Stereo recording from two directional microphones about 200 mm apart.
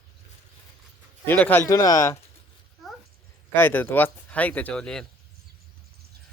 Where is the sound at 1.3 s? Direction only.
10° left (ahead or behind).